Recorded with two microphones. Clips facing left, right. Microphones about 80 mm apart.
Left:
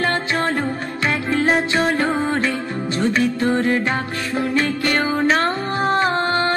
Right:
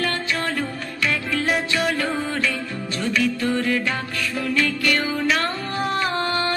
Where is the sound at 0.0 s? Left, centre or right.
Left.